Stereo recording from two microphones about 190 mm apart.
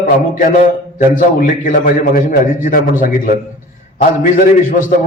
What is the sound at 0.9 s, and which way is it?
A man's voice, 45° left (ahead or behind).